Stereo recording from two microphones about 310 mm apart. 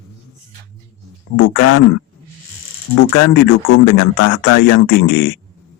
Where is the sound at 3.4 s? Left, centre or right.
Left.